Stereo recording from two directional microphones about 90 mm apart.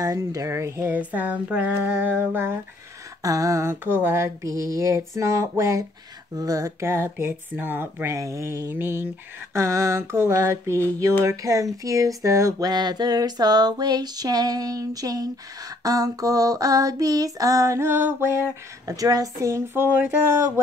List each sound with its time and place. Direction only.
0.0 s female singing: 40° right (ahead or behind)
0.9 s speech: 15° right (ahead or behind)
3.2 s female singing: 40° right (ahead or behind)
3.8 s female singing: 25° right (ahead or behind)
6.3 s speech: 40° right (ahead or behind)
11.2 s a sound: 40° right (ahead or behind)
15.8 s female singing: 45° right (ahead or behind); by 20.4 s 25° right (ahead or behind)